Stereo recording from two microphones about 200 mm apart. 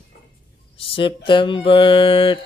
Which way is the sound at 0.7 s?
25° left (ahead or behind).